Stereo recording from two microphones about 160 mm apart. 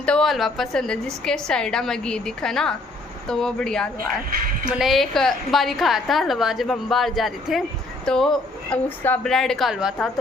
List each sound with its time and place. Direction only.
0.0 s a woman's voice: 5° left (ahead or behind)
4.3 s a woman's voice: 65° right (ahead or behind)
4.7 s a woman's voice: centre (ahead or behind)